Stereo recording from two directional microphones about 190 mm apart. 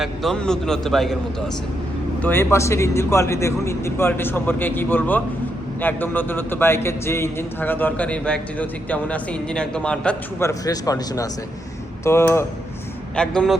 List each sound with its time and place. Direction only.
0.0 s a man's voice: centre (ahead or behind)
2.2 s a man's voice: 10° left (ahead or behind)
10.5 s a man's voice: 20° left (ahead or behind); by 13.6 s 5° left (ahead or behind)